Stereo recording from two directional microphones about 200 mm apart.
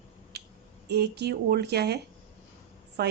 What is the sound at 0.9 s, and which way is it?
A woman's voice, 55° right (ahead or behind).